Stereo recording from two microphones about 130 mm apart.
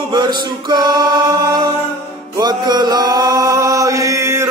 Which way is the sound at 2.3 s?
30° right (ahead or behind).